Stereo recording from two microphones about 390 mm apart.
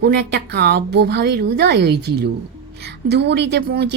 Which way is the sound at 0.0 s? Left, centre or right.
Right.